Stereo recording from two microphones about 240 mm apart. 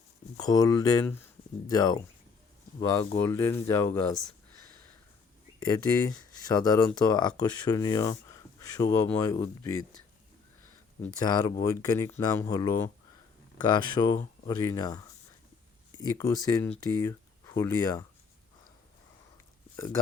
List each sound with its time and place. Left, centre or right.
0.3 s speech: centre
5.5 s speech: centre
11.0 s speech: centre